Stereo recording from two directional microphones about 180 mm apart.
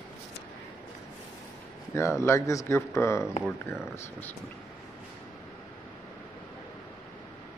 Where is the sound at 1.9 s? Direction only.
15° left (ahead or behind).